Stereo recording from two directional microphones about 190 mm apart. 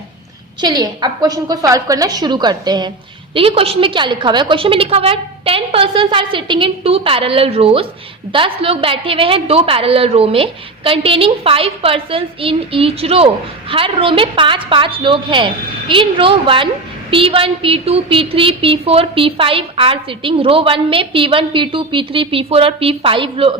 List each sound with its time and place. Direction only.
0.6 s a woman's voice: 20° right (ahead or behind)